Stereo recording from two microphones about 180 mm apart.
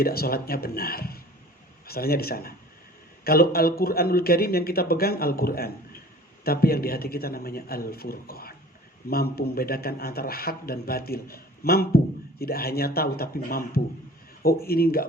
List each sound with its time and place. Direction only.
0.0 s a man's voice: 55° left (ahead or behind)